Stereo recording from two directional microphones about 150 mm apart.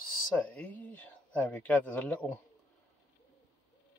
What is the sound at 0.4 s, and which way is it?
Speech, 10° left (ahead or behind).